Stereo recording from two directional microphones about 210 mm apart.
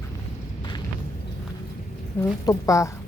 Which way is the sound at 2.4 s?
15° left (ahead or behind).